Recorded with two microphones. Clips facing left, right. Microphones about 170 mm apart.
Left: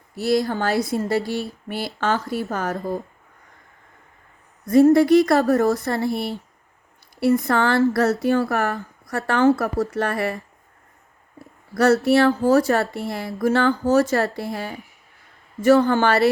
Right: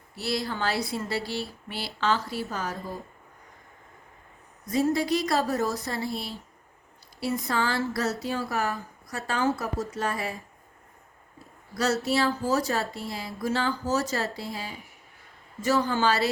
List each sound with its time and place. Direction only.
0.2 s speech: 45° left (ahead or behind)
4.6 s speech: 55° left (ahead or behind)
11.8 s speech: 60° left (ahead or behind)